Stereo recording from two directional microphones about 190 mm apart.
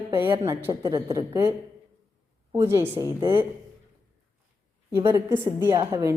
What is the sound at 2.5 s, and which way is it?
Speech, 15° right (ahead or behind).